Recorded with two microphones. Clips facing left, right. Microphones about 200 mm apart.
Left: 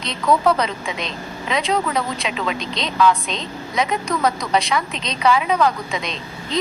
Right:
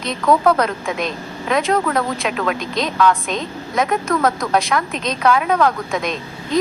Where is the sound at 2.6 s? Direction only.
50° right (ahead or behind).